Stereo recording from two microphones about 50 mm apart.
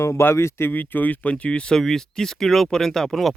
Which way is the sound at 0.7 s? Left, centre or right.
Left.